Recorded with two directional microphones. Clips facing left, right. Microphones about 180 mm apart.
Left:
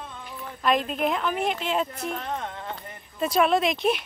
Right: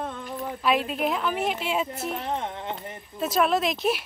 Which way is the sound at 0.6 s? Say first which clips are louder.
Left 1 dB; 5° right (ahead or behind).